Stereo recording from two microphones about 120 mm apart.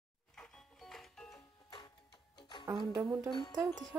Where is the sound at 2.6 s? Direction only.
35° right (ahead or behind).